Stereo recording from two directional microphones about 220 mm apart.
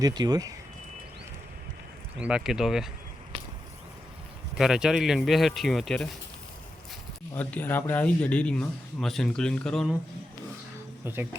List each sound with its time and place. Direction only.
0.0 s speech: 20° right (ahead or behind)
2.1 s speech: 5° right (ahead or behind)
4.5 s speech: centre (ahead or behind)
7.3 s speech: 10° left (ahead or behind)
11.0 s speech: 10° right (ahead or behind)